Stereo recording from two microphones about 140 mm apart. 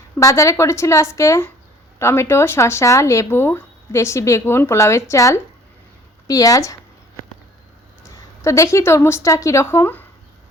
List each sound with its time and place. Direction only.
0.2 s speech: 25° left (ahead or behind)
8.4 s speech: 20° left (ahead or behind)